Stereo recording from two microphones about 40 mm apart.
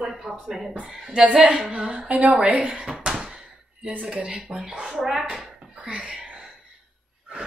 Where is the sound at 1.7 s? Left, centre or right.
Right.